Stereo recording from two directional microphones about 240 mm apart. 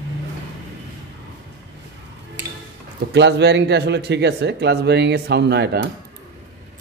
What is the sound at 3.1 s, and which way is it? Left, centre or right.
Speech, right.